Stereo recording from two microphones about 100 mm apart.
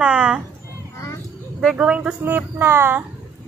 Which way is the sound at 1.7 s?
10° right (ahead or behind).